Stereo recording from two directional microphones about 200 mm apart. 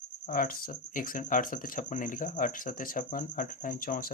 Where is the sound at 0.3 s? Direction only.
45° left (ahead or behind).